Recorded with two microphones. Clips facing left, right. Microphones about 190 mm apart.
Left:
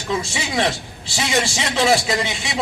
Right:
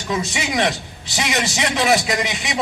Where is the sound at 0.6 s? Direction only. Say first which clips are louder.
Right 1 dB; 20° right (ahead or behind).